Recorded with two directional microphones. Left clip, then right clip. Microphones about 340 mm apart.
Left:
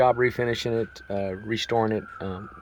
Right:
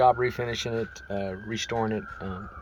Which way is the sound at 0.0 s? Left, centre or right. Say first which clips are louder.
Left 1 dB; centre.